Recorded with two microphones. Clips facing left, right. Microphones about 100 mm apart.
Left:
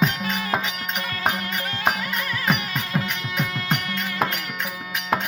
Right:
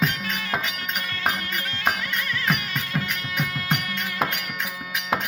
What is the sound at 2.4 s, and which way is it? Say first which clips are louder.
Music: left 2 dB; 10° left (ahead or behind).